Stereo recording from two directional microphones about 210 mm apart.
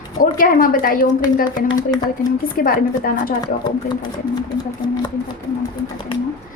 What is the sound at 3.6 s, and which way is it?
Speech, 20° left (ahead or behind).